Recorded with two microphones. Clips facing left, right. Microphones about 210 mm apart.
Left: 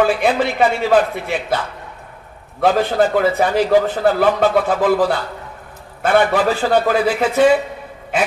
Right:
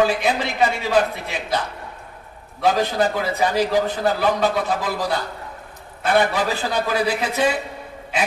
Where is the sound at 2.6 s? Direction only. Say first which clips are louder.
Left 4 dB; 55° left (ahead or behind).